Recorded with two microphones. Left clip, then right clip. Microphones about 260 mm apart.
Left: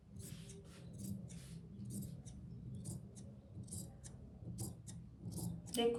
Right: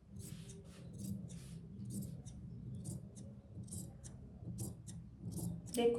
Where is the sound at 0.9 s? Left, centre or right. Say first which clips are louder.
Right 2 dB; centre.